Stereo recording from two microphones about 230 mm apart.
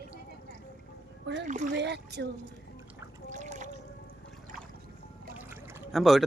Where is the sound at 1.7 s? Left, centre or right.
Right.